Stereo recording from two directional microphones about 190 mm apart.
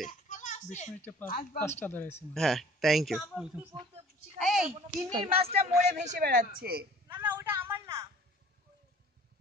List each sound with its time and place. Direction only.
0.1 s a sound: 40° left (ahead or behind)
1.2 s speech: 50° left (ahead or behind)
1.6 s speech: 10° left (ahead or behind)
4.7 s speech: 30° right (ahead or behind); by 6.9 s 55° right (ahead or behind)
7.1 s a woman's voice: 10° right (ahead or behind)